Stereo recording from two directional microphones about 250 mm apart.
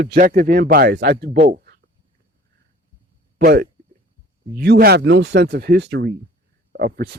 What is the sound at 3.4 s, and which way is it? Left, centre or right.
Speech, right.